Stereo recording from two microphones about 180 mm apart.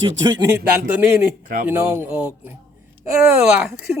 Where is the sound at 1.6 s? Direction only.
10° right (ahead or behind).